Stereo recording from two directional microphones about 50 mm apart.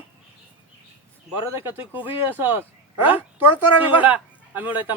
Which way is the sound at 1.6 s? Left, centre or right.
Right.